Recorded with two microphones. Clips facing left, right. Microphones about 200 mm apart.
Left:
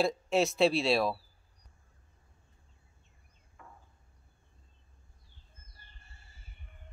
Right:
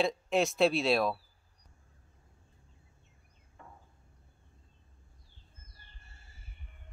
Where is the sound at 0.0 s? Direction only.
Centre (ahead or behind).